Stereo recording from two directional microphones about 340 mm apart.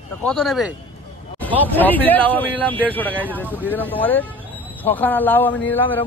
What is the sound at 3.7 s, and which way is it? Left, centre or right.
Speech, centre.